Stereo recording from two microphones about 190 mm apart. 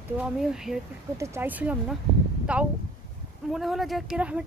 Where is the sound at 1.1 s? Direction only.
15° right (ahead or behind).